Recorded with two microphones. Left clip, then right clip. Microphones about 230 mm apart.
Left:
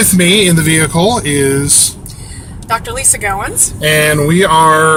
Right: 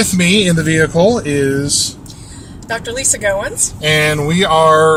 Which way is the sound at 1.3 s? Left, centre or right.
Left.